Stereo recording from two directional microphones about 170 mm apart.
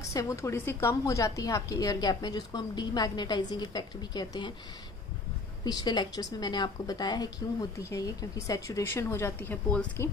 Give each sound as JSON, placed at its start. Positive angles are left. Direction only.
{"t": 0.1, "sound": "a woman's voice", "side_deg": 20}
{"t": 5.6, "sound": "a woman's voice", "side_deg": 25}